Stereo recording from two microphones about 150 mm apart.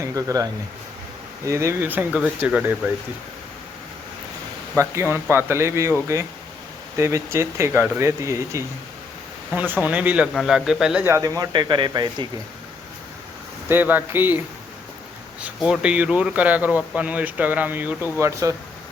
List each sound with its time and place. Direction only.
0.0 s speech: 20° right (ahead or behind)
1.5 s speech: 20° right (ahead or behind)
4.8 s a man's voice: 15° right (ahead or behind)
11.0 s speech: 20° right (ahead or behind)
13.7 s speech: 10° right (ahead or behind)
15.4 s speech: 5° right (ahead or behind)